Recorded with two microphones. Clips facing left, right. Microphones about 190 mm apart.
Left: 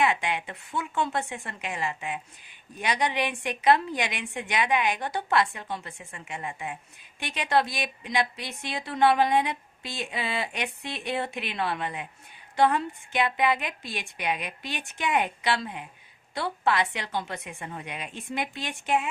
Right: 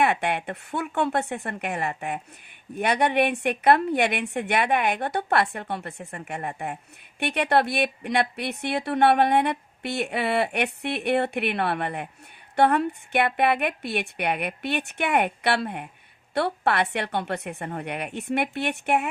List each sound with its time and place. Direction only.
0.0 s a woman's voice: 60° right (ahead or behind)